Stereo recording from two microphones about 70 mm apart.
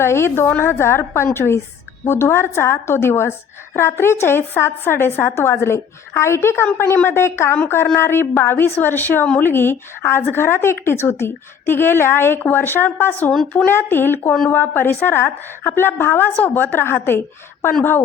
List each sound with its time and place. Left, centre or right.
0.0 s a woman's voice: left